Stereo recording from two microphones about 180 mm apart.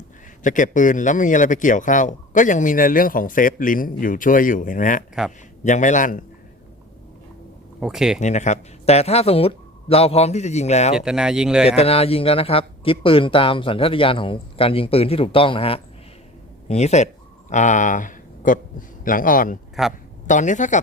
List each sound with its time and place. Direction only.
0.4 s a man's voice: 45° left (ahead or behind)
7.8 s speech: 5° right (ahead or behind)
8.2 s speech: 40° left (ahead or behind)
10.9 s speech: 5° right (ahead or behind)
11.8 s a man's voice: 35° left (ahead or behind); by 19.5 s 50° left (ahead or behind)
19.8 s speech: centre (ahead or behind)
20.2 s a man's voice: 45° left (ahead or behind)